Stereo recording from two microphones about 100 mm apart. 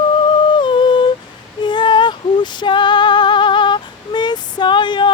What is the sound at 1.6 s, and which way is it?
Female singing, 50° left (ahead or behind).